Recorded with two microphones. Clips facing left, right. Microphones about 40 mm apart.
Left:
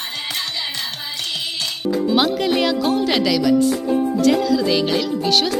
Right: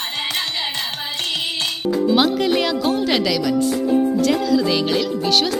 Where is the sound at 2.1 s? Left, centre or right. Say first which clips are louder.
Left 1 dB; centre.